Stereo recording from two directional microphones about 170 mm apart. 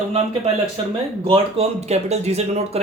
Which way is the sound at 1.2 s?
35° right (ahead or behind).